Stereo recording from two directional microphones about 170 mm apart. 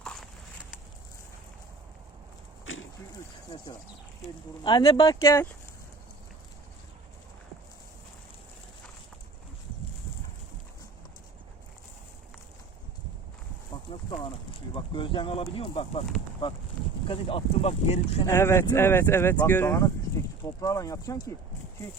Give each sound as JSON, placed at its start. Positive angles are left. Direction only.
{"t": 0.0, "sound": "walk", "side_deg": 5}
{"t": 4.6, "sound": "speech", "side_deg": 30}
{"t": 5.0, "sound": "speech", "side_deg": 15}
{"t": 14.1, "sound": "a sound", "side_deg": 30}
{"t": 17.1, "sound": "speech", "side_deg": 35}
{"t": 18.3, "sound": "speech", "side_deg": 15}